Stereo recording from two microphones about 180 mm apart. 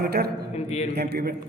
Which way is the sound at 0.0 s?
60° right (ahead or behind).